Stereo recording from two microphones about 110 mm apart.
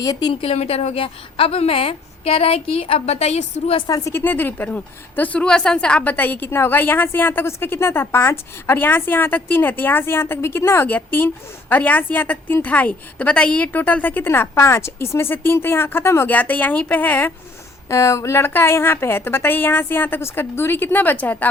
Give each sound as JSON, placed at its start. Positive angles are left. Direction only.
{"t": 0.0, "sound": "a woman's voice", "side_deg": 35}
{"t": 0.4, "sound": "a woman's voice", "side_deg": 70}
{"t": 3.8, "sound": "a woman's voice", "side_deg": 35}
{"t": 4.1, "sound": "a woman's voice", "side_deg": 20}
{"t": 17.8, "sound": "a woman's voice", "side_deg": 30}